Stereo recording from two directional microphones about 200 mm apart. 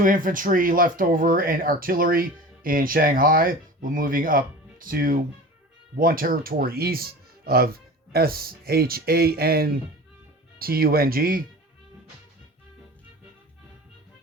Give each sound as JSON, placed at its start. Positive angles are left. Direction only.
{"t": 0.0, "sound": "speech", "side_deg": -40}